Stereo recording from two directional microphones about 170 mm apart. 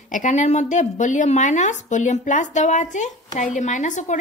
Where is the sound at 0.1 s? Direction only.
45° left (ahead or behind).